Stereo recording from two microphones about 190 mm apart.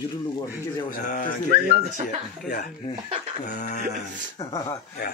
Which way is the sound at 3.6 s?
40° left (ahead or behind).